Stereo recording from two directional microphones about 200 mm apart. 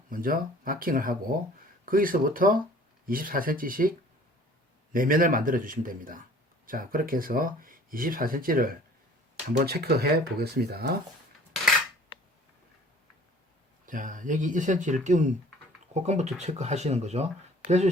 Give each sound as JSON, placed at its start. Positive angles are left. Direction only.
{"t": 0.1, "sound": "speech", "side_deg": -45}
{"t": 13.8, "sound": "speech", "side_deg": -40}